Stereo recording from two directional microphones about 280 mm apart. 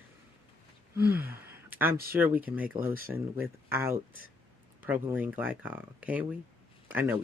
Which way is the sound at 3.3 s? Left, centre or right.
Centre.